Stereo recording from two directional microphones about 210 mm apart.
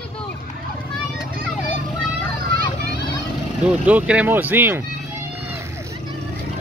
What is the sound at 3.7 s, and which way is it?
Speech, 5° right (ahead or behind).